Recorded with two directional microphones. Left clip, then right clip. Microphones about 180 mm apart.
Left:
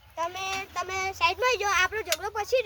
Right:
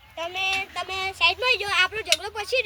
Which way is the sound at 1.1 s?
10° left (ahead or behind).